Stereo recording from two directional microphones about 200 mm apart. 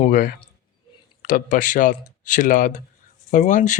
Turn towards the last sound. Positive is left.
turn(degrees=40)  # may be behind; listen again after turning